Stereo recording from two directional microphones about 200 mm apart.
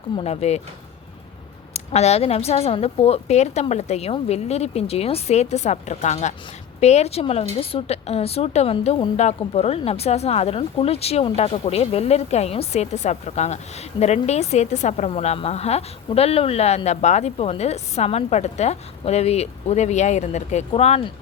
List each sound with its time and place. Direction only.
0.2 s a woman's voice: 30° left (ahead or behind)
1.7 s a woman's voice: 30° left (ahead or behind)